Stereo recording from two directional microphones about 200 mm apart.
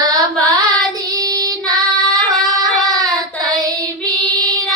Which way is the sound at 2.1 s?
20° right (ahead or behind).